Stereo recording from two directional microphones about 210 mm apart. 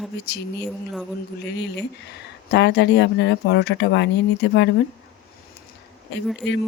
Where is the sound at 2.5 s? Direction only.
55° left (ahead or behind).